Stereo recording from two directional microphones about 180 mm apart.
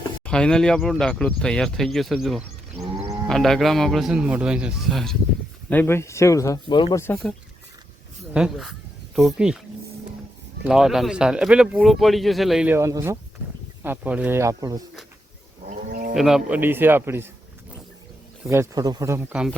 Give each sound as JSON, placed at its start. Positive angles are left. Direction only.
{"t": 0.3, "sound": "speech", "side_deg": 5}
{"t": 8.3, "sound": "speech", "side_deg": -5}
{"t": 10.6, "sound": "speech", "side_deg": -5}
{"t": 15.9, "sound": "livestock", "side_deg": -50}
{"t": 16.1, "sound": "speech", "side_deg": 0}
{"t": 18.4, "sound": "speech", "side_deg": -15}